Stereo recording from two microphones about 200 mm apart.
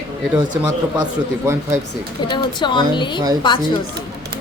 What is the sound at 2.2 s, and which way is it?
Speech, 20° left (ahead or behind).